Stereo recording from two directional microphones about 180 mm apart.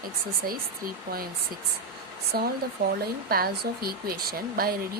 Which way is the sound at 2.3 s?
55° right (ahead or behind).